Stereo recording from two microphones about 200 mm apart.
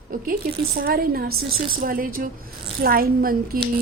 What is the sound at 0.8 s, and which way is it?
A woman's voice, 50° right (ahead or behind).